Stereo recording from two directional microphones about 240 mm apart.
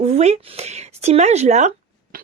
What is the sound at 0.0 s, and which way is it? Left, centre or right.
Speech, right.